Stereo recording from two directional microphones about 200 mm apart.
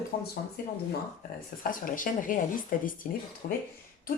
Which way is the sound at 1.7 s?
40° left (ahead or behind).